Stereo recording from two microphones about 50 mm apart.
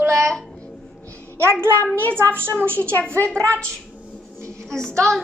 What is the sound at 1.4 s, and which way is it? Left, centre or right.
A child's voice, right.